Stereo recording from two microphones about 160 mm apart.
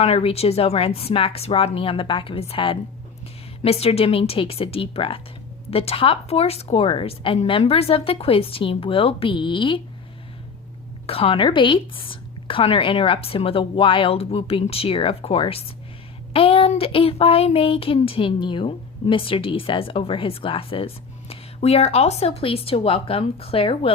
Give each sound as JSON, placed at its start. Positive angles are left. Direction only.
{"t": 0.0, "sound": "speech", "side_deg": 40}
{"t": 11.0, "sound": "speech", "side_deg": 35}